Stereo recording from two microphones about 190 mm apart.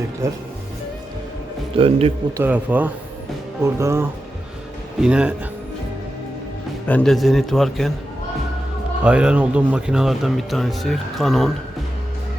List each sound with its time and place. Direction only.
1.7 s a man's voice: 30° right (ahead or behind)
2.4 s speech: 10° right (ahead or behind)
6.8 s speech: 5° left (ahead or behind)
9.0 s speech: 5° right (ahead or behind)